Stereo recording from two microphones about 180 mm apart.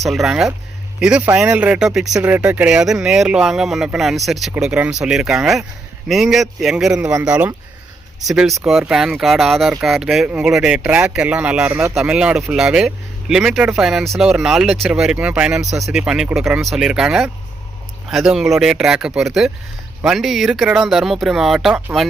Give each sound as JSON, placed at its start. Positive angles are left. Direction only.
{"t": 0.0, "sound": "speech", "side_deg": 0}